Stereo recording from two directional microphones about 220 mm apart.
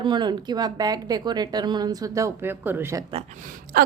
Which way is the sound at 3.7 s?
40° right (ahead or behind).